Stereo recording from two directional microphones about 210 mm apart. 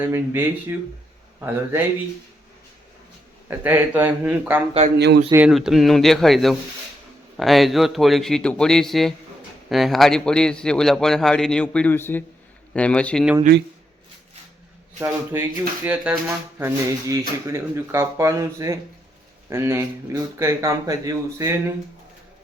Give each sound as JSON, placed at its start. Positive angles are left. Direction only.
{"t": 0.0, "sound": "speech", "side_deg": -10}
{"t": 3.5, "sound": "speech", "side_deg": -10}
{"t": 4.9, "sound": "a man's voice", "side_deg": -55}
{"t": 5.3, "sound": "a man's voice", "side_deg": -5}
{"t": 14.9, "sound": "speech", "side_deg": -10}